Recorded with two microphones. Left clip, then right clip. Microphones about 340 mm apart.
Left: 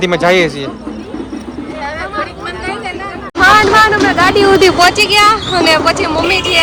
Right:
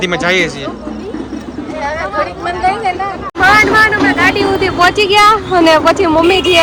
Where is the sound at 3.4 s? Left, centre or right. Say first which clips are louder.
Left 1 dB; centre.